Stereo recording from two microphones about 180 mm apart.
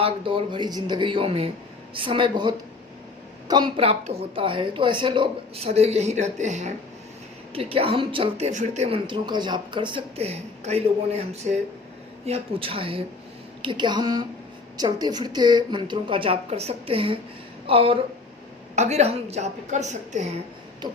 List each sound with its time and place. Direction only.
0.0 s a woman's voice: 30° right (ahead or behind)